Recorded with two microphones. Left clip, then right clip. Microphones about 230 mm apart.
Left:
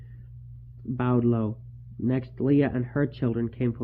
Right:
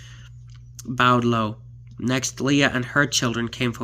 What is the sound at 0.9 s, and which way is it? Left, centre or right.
Speech, right.